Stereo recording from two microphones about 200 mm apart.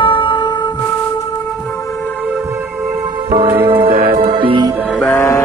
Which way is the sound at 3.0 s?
20° right (ahead or behind).